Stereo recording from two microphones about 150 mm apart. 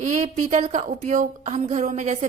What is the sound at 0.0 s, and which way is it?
A woman's voice, 55° right (ahead or behind).